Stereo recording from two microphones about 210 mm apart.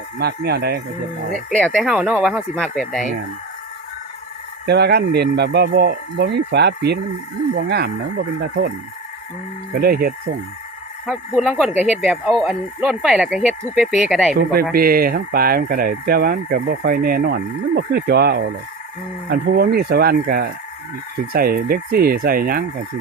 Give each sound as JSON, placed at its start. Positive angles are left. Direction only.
{"t": 0.2, "sound": "speech", "side_deg": -50}
{"t": 1.5, "sound": "speech", "side_deg": 5}
{"t": 4.6, "sound": "speech", "side_deg": -50}
{"t": 9.7, "sound": "speech", "side_deg": -45}
{"t": 11.0, "sound": "speech", "side_deg": 0}
{"t": 14.3, "sound": "speech", "side_deg": -45}